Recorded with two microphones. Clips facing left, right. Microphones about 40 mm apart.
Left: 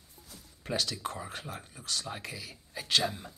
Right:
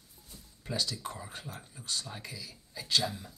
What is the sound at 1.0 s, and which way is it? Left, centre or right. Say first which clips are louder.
Speech: left 4 dB; left.